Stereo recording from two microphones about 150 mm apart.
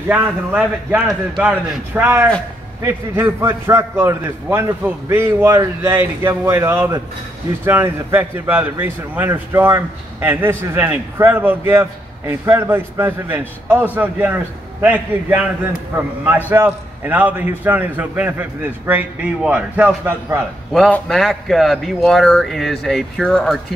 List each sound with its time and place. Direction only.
0.1 s a man's voice: 10° right (ahead or behind)
20.7 s speech: centre (ahead or behind)